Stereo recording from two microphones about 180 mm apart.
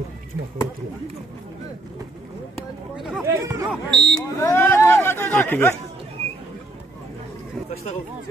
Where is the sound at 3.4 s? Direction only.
20° right (ahead or behind).